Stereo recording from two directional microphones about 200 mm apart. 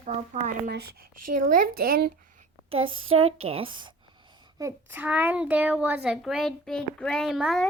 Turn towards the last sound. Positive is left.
turn(degrees=0)  # may be behind; listen again after turning